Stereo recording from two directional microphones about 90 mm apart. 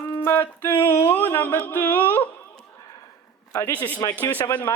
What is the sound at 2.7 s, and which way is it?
Sniff, 40° left (ahead or behind).